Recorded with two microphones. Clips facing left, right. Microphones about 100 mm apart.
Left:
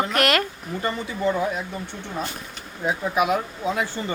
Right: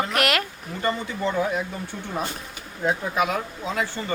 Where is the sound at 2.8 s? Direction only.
15° left (ahead or behind).